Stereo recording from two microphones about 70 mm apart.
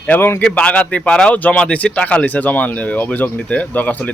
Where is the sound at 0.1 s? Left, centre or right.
Left.